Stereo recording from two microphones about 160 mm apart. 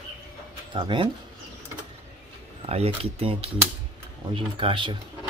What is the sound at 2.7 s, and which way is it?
Speech, 40° right (ahead or behind).